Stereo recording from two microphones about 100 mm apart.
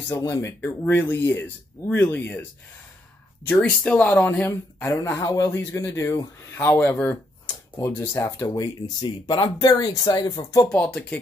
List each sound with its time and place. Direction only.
0.1 s speech: 35° left (ahead or behind)
3.4 s speech: 15° left (ahead or behind)
4.5 s speech: 25° left (ahead or behind)
5.2 s speech: 35° left (ahead or behind)
9.3 s speech: 45° left (ahead or behind)
10.6 s speech: 10° left (ahead or behind)